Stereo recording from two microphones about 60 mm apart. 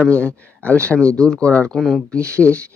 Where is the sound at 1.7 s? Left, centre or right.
Centre.